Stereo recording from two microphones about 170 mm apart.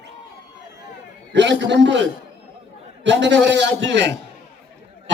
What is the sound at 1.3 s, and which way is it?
Speech, 90° right.